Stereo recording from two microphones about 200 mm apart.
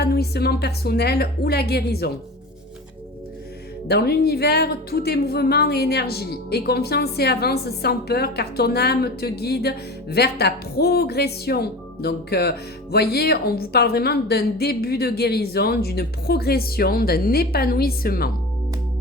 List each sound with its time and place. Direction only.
0.0 s a woman's voice: 50° left (ahead or behind)
3.8 s a woman's voice: 55° left (ahead or behind)